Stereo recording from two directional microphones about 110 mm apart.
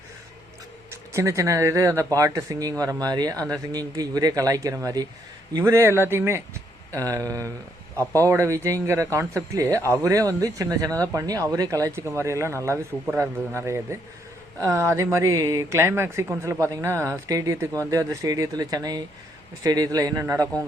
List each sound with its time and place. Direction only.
0.9 s speech: 25° right (ahead or behind)